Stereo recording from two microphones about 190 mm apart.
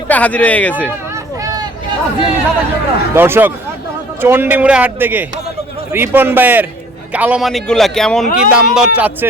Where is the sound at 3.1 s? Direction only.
10° right (ahead or behind).